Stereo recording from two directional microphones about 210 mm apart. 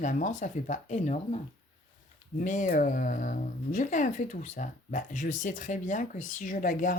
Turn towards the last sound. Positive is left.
turn(degrees=40)  # may be behind; listen again after turning